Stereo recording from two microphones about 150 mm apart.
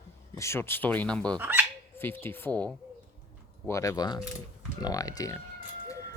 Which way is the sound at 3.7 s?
20° left (ahead or behind).